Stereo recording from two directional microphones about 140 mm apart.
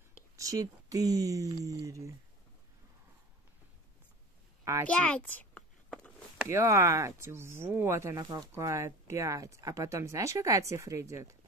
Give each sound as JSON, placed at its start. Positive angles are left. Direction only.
{"t": 0.4, "sound": "speech", "side_deg": -25}
{"t": 4.8, "sound": "a sound", "side_deg": 10}
{"t": 6.5, "sound": "speech", "side_deg": -20}